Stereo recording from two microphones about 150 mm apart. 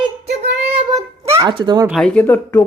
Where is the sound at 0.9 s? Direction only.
20° right (ahead or behind).